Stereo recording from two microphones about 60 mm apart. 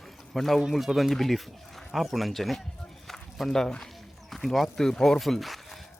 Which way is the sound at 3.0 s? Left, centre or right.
Centre.